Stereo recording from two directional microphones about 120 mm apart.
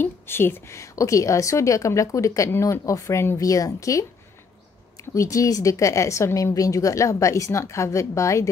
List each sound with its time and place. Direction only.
0.0 s a woman's voice: 20° left (ahead or behind)
5.1 s a woman's voice: 25° left (ahead or behind)